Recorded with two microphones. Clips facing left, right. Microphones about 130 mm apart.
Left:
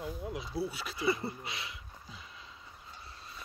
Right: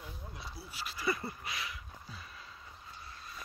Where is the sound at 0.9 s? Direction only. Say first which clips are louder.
Left 3 dB; 25° left (ahead or behind).